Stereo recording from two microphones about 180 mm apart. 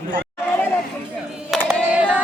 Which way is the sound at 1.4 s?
Centre (ahead or behind).